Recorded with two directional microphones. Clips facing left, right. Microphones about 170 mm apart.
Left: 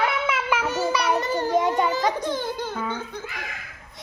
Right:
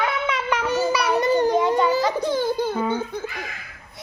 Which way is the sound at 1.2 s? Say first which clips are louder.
Right 4 dB; 15° right (ahead or behind).